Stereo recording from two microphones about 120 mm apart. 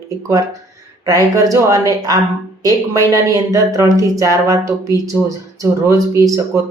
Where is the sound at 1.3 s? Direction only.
25° right (ahead or behind).